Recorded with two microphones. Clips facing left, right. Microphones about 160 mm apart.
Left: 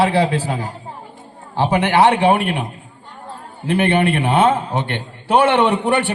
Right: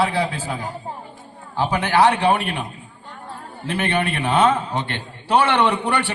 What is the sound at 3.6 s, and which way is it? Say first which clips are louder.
Speech: left 6 dB; 55° left (ahead or behind).